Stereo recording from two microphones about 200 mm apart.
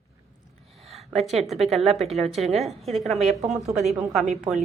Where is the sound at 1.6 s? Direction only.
Centre (ahead or behind).